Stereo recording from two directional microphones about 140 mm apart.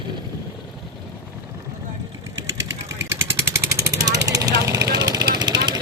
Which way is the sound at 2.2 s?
20° right (ahead or behind).